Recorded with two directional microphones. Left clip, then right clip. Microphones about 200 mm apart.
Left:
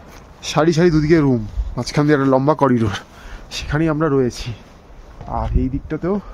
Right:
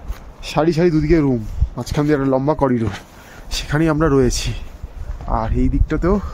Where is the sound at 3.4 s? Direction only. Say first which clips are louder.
Right 2 dB; 5° right (ahead or behind); by 6.2 s 20° right (ahead or behind).